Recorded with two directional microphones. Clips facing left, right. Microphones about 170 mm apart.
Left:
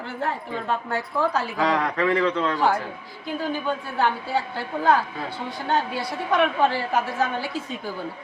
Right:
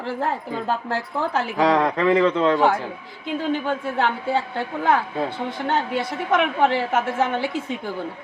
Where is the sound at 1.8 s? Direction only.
25° right (ahead or behind).